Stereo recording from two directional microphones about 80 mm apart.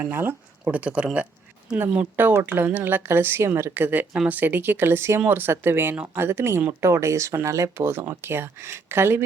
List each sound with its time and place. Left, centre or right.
0.0 s speech: right
0.7 s speech: centre